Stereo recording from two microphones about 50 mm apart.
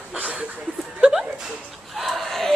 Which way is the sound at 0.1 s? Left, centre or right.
Right.